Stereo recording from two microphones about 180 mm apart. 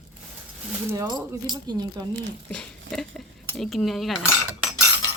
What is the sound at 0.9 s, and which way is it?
Speech, 20° right (ahead or behind).